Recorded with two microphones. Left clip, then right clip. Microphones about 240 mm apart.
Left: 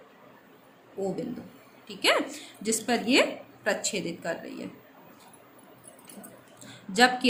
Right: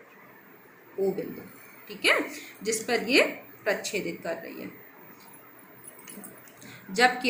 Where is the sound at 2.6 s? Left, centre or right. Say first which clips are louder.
Even; left.